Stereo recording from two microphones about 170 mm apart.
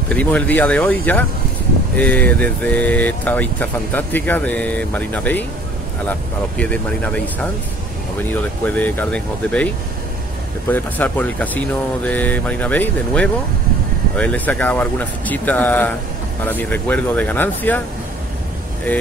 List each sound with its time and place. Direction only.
0.1 s speech: 10° left (ahead or behind)
6.6 s speech: 5° left (ahead or behind)
8.3 s speech: 10° left (ahead or behind)
10.7 s speech: 10° left (ahead or behind)